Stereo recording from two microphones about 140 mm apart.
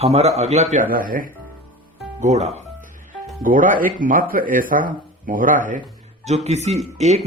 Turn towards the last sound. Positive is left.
turn(degrees=-50)  # may be behind; listen again after turning